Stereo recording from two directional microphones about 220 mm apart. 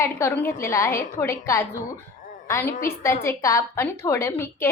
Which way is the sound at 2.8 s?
10° left (ahead or behind).